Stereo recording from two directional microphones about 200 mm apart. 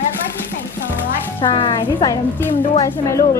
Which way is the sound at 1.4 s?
25° left (ahead or behind).